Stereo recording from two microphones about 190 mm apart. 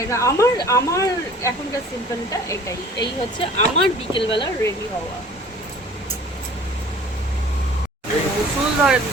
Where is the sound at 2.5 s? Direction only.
15° left (ahead or behind).